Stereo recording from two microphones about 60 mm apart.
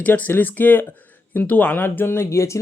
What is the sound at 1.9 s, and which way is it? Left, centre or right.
Speech, left.